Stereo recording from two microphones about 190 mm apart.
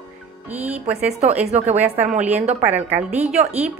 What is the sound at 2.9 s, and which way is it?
Speech, 10° right (ahead or behind).